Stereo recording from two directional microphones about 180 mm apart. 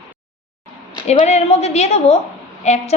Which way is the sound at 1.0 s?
35° left (ahead or behind).